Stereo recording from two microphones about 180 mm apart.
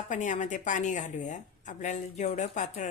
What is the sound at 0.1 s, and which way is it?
A woman's voice, 45° left (ahead or behind).